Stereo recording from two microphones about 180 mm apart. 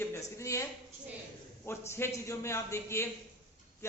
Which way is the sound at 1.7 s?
15° left (ahead or behind).